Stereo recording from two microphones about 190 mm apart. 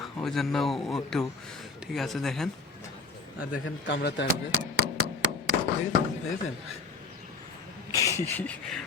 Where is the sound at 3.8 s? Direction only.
65° left (ahead or behind).